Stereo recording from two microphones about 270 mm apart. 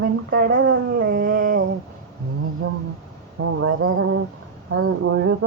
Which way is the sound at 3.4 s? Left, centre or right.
Right.